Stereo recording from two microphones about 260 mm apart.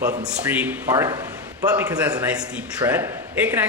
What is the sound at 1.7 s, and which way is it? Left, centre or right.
A man's voice, centre.